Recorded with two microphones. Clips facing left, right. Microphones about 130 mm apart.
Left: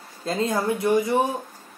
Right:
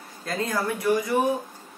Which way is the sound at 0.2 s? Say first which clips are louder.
Left 3 dB; 25° left (ahead or behind).